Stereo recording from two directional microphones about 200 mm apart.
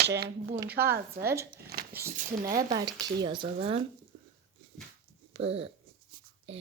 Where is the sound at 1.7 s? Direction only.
50° right (ahead or behind).